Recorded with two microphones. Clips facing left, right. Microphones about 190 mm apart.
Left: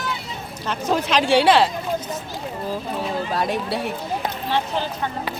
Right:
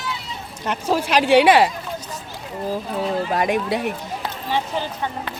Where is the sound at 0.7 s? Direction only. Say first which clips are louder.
Right 1 dB; 10° right (ahead or behind).